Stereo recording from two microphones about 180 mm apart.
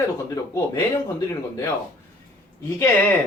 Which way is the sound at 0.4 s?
20° left (ahead or behind).